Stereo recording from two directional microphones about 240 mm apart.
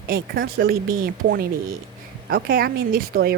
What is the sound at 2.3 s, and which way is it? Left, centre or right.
A woman's voice, right.